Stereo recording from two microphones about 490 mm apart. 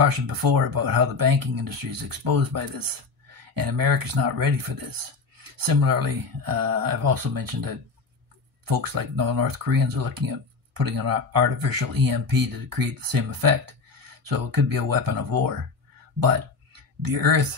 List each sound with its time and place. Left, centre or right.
0.0 s speech: right